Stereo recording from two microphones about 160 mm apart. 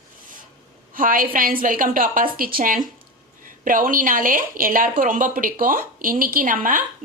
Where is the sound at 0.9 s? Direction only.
60° right (ahead or behind).